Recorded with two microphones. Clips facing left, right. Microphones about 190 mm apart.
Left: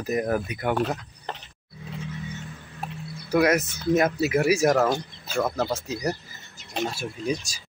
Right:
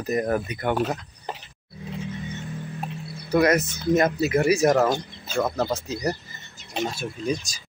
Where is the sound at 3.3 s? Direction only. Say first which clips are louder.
Right 1 dB; 5° left (ahead or behind).